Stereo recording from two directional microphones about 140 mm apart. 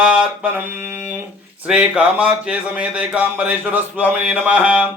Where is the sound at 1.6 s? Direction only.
5° right (ahead or behind).